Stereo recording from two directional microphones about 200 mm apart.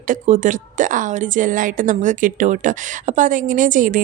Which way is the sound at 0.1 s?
40° right (ahead or behind).